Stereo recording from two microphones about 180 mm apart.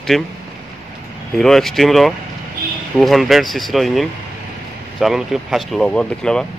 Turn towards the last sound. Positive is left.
turn(degrees=5)  # may be behind; listen again after turning